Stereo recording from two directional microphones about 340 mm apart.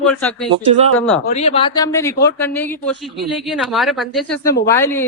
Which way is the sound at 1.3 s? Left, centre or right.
Centre.